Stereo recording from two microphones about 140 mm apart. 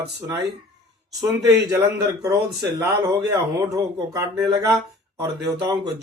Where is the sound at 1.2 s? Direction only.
25° right (ahead or behind).